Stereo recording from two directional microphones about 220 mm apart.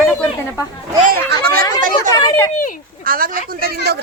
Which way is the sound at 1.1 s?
45° right (ahead or behind).